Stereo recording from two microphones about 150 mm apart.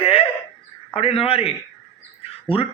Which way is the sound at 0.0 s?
40° left (ahead or behind).